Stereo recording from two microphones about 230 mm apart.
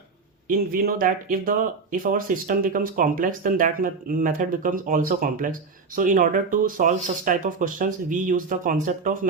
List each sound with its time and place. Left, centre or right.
0.4 s speech: right